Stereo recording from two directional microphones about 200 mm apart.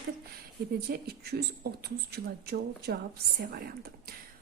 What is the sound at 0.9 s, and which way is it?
A woman's voice, 50° right (ahead or behind).